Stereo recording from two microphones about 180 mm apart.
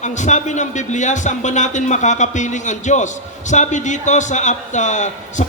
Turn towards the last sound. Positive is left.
turn(degrees=40)  # may be behind; listen again after turning